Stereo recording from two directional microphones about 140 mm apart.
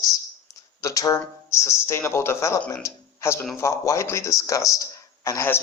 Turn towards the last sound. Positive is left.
turn(degrees=20)  # may be behind; listen again after turning